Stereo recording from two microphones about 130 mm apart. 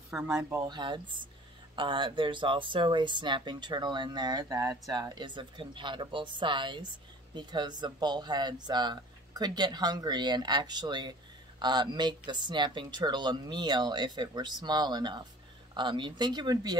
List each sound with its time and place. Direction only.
0.1 s speech: 5° right (ahead or behind)
0.7 s speech: 35° right (ahead or behind)